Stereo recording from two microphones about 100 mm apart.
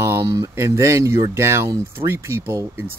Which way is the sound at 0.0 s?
25° right (ahead or behind).